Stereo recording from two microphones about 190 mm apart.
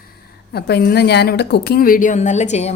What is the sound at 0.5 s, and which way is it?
A woman's voice, 55° left (ahead or behind).